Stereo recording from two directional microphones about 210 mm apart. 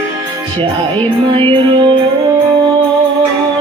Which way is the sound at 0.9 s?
25° right (ahead or behind).